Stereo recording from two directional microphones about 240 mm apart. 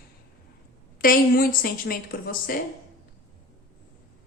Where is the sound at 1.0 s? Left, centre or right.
Left.